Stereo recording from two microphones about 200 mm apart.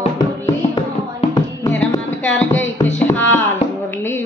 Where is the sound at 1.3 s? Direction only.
20° left (ahead or behind).